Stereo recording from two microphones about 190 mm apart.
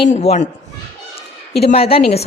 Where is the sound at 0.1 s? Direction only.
35° left (ahead or behind).